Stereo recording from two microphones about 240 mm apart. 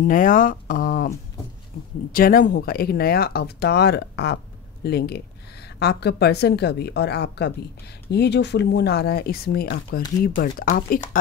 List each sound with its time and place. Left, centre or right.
0.1 s speech: left
2.1 s a woman's voice: left